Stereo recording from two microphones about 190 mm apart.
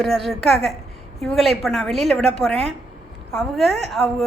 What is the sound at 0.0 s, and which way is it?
A woman's voice, centre (ahead or behind).